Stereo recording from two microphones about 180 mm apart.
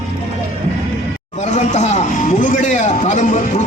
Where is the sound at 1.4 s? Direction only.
40° left (ahead or behind).